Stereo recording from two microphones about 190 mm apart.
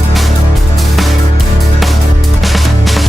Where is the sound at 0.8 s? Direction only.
Centre (ahead or behind).